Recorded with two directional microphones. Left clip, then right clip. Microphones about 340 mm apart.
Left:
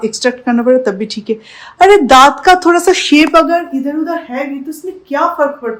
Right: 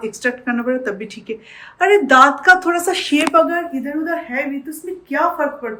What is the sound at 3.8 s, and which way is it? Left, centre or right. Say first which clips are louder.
Speech: left 5 dB; centre.